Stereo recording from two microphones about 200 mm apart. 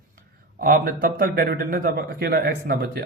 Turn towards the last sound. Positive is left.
turn(degrees=-50)  # may be behind; listen again after turning